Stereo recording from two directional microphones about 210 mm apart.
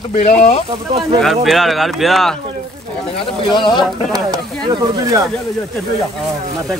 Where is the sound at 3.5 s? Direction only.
20° left (ahead or behind).